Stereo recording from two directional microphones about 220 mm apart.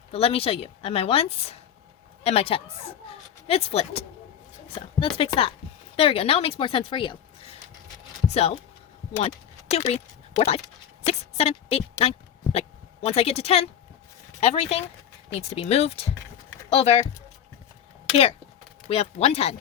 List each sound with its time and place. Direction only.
0.1 s a woman's voice: 25° left (ahead or behind)
3.0 s a sound: 25° left (ahead or behind)
3.4 s a woman's voice: 25° left (ahead or behind)
11.0 s a sound: 30° left (ahead or behind)
13.1 s a woman's voice: 30° left (ahead or behind)
18.9 s a woman's voice: 25° left (ahead or behind)